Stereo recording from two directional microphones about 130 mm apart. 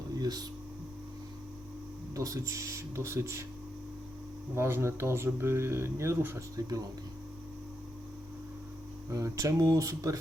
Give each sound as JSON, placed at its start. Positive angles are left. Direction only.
{"t": 0.1, "sound": "a sound", "side_deg": -30}
{"t": 2.1, "sound": "speech", "side_deg": -25}
{"t": 4.5, "sound": "speech", "side_deg": -20}
{"t": 9.0, "sound": "speech", "side_deg": -25}